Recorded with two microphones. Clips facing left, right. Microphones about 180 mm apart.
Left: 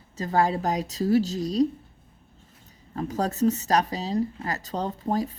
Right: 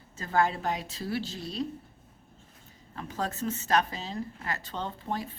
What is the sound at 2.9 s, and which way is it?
Speech, 40° left (ahead or behind).